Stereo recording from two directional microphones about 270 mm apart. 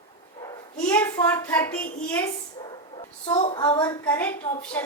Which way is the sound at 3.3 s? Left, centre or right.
Centre.